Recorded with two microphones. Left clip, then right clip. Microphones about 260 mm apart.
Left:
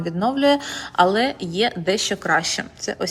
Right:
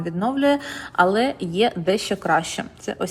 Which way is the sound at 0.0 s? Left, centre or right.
Centre.